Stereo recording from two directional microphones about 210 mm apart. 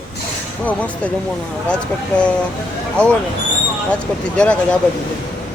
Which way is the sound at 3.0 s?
5° left (ahead or behind).